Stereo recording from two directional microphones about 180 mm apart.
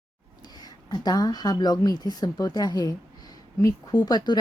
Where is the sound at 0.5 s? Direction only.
20° left (ahead or behind).